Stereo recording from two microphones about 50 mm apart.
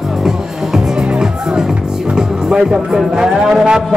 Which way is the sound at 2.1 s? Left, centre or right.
Centre.